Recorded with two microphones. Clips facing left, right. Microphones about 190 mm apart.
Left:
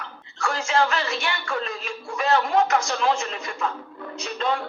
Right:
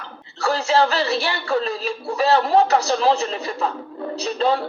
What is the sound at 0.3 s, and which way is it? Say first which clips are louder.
A woman's voice: right 5 dB; 35° right (ahead or behind).